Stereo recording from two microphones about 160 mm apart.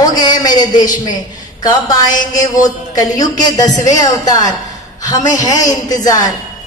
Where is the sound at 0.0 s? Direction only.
25° left (ahead or behind).